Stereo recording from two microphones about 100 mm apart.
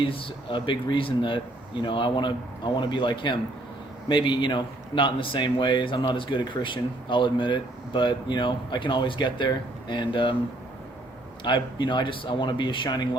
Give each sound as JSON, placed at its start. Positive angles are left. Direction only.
{"t": 0.0, "sound": "a man's voice", "side_deg": 60}
{"t": 11.4, "sound": "a man's voice", "side_deg": 50}